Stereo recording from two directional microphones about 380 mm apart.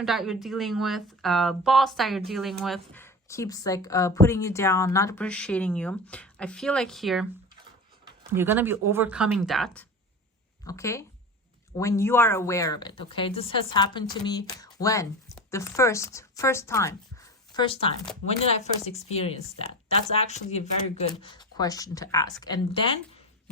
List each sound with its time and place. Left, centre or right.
0.0 s a woman's voice: centre